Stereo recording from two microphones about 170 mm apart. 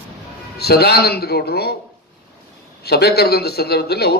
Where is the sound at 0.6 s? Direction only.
70° left (ahead or behind).